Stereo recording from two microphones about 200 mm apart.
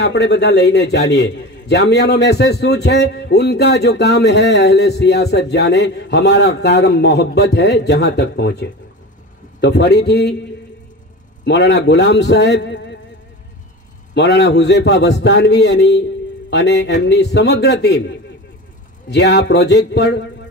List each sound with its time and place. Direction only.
0.0 s a man's voice: 60° left (ahead or behind)
11.4 s a man's voice: 60° left (ahead or behind)
14.1 s a man's voice: 55° left (ahead or behind)